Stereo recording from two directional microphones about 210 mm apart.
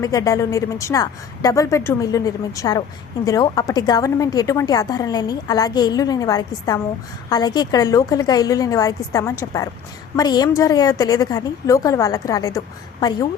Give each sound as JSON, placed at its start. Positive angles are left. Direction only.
{"t": 0.0, "sound": "a woman's voice", "side_deg": 15}